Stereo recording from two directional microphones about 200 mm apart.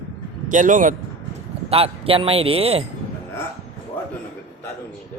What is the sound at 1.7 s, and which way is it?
Speech, 30° right (ahead or behind).